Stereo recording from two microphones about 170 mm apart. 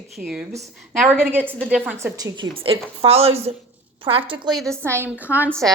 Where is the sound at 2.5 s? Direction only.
35° right (ahead or behind).